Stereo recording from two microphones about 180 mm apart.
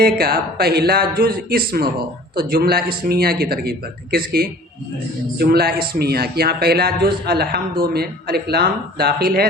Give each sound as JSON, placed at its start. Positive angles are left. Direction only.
{"t": 0.0, "sound": "a man's voice", "side_deg": -60}